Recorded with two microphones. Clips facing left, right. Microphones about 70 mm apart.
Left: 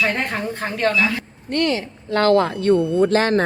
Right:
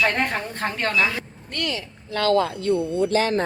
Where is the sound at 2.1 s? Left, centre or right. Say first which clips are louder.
Left 4 dB; left.